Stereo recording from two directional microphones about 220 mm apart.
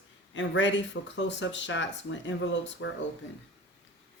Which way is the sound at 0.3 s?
55° left (ahead or behind).